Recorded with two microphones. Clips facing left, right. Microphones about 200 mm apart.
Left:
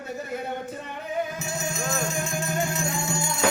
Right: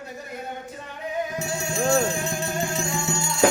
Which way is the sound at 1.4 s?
30° right (ahead or behind).